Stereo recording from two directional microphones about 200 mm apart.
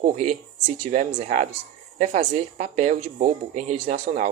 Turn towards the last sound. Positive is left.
turn(degrees=-35)  # may be behind; listen again after turning